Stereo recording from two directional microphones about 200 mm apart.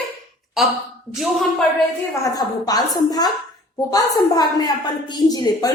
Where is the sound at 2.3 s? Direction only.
20° left (ahead or behind).